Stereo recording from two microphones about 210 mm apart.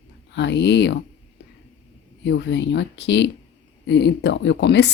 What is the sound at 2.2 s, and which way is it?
Speech, 60° left (ahead or behind).